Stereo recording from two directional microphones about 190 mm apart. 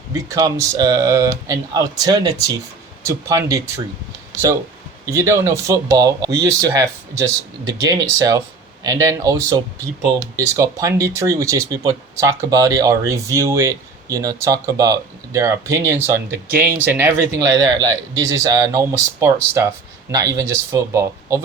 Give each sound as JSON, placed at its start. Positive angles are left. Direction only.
{"t": 0.3, "sound": "speech", "side_deg": -15}
{"t": 5.0, "sound": "speech", "side_deg": -15}